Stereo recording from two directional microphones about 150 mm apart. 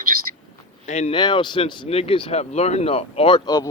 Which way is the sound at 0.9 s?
50° left (ahead or behind).